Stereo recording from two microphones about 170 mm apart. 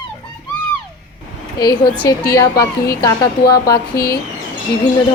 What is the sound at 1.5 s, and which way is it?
A woman's voice, 25° left (ahead or behind).